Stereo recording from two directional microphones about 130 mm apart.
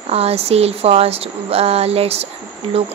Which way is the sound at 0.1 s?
50° right (ahead or behind).